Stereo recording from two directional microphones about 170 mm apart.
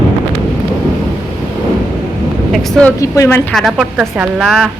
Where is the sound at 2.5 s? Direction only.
5° left (ahead or behind).